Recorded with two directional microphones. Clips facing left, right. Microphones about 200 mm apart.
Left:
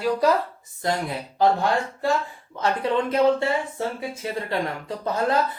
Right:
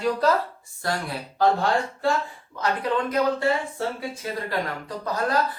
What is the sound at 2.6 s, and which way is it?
A man's voice, 25° left (ahead or behind).